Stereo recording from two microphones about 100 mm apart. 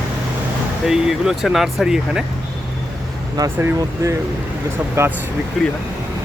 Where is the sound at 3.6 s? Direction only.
30° right (ahead or behind).